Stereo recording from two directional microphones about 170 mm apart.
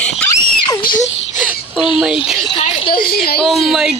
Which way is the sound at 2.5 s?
30° left (ahead or behind).